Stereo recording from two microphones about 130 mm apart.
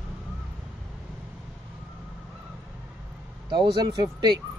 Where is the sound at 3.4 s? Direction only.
35° right (ahead or behind).